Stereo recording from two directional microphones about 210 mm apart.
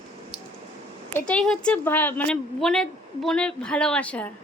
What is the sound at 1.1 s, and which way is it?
A woman's voice, 5° left (ahead or behind).